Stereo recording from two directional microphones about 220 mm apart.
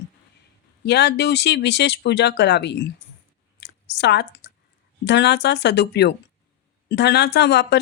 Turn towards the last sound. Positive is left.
turn(degrees=50)  # may be behind; listen again after turning